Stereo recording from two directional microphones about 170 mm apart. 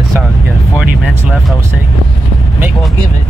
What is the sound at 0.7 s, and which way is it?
Vehicle, 5° right (ahead or behind).